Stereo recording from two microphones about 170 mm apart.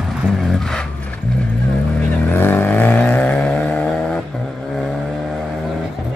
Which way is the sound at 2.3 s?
10° left (ahead or behind).